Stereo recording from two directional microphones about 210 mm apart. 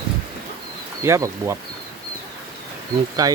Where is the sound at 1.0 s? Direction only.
15° right (ahead or behind).